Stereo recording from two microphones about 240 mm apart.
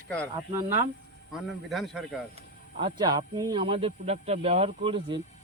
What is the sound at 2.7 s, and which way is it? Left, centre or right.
Speech, centre.